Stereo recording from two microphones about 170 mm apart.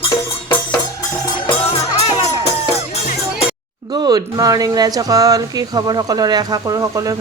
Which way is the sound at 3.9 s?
25° right (ahead or behind).